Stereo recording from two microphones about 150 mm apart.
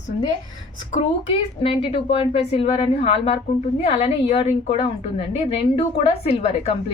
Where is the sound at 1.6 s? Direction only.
40° left (ahead or behind).